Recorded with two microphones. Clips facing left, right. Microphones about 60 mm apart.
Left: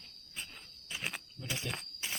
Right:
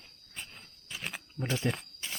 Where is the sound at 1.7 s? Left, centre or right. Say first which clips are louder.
Right 8 dB; right.